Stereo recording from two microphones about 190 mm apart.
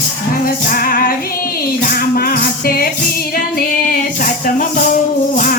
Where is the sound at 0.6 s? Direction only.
50° left (ahead or behind).